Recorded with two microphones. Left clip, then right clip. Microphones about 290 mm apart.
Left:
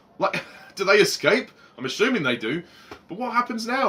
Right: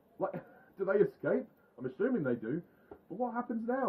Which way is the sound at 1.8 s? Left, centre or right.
Centre.